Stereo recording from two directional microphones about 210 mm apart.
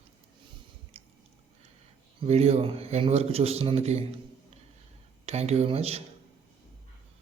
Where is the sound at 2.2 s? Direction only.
30° right (ahead or behind).